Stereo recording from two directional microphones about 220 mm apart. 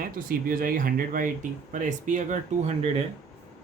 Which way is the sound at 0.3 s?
40° right (ahead or behind).